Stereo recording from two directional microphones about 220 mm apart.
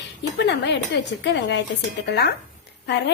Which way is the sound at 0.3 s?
50° left (ahead or behind).